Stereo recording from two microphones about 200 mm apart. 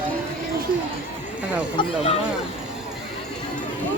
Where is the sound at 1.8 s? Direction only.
25° left (ahead or behind).